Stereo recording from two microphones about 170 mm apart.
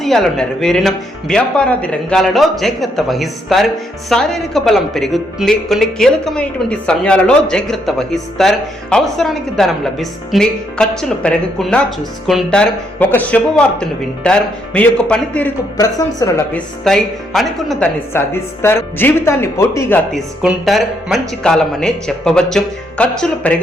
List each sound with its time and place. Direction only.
0.0 s speech: centre (ahead or behind)
15.8 s speech: 20° left (ahead or behind)
16.8 s speech: centre (ahead or behind)
18.1 s speech: 15° left (ahead or behind)
20.1 s speech: centre (ahead or behind)